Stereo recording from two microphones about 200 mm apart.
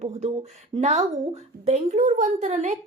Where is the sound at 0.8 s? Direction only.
30° right (ahead or behind).